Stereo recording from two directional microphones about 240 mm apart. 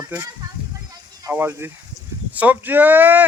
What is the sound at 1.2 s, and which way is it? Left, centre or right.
Speech, centre.